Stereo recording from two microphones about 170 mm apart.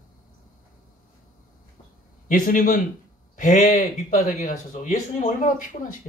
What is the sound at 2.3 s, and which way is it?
Speech, 50° left (ahead or behind).